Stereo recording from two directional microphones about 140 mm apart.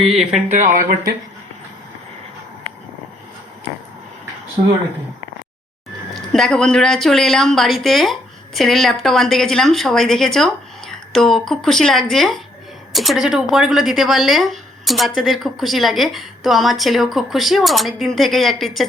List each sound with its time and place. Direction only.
0.0 s speech: centre (ahead or behind)
0.5 s speech: 65° right (ahead or behind); by 1.1 s 80° right
6.1 s speech: centre (ahead or behind)